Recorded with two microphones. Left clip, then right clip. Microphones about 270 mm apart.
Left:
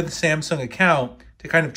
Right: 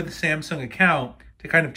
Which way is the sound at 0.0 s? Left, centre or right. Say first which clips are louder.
Left 3 dB; centre.